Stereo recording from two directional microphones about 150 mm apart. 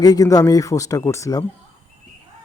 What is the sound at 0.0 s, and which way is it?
Speech, 25° left (ahead or behind).